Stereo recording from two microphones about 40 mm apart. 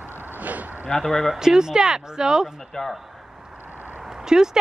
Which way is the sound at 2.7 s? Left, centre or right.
Centre.